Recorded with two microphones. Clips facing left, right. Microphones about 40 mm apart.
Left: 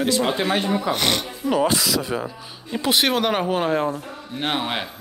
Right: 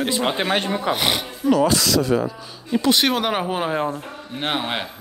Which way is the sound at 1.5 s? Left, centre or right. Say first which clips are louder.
Right 2 dB; centre.